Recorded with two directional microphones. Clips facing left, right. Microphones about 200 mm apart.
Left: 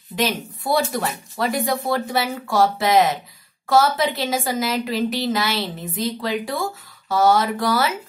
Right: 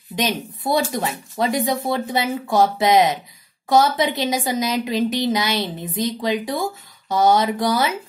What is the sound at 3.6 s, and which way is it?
A woman's voice, 20° right (ahead or behind).